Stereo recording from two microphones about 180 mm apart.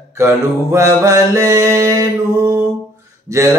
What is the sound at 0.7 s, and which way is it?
Mantra, 15° right (ahead or behind).